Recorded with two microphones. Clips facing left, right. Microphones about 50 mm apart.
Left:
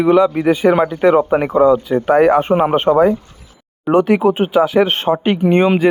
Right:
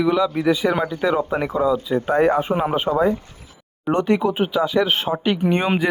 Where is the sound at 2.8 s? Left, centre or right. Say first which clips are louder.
Left 7 dB; left.